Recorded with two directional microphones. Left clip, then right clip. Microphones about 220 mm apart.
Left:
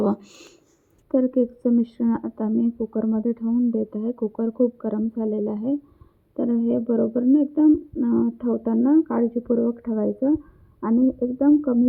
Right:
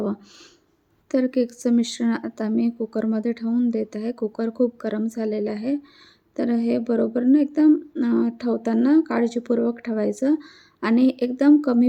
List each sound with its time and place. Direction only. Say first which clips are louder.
1.1 s a woman's voice: left 1 dB; 10° right (ahead or behind)
5.2 s a woman's voice: right 1 dB; 5° right (ahead or behind); by 11.8 s 30° right (ahead or behind)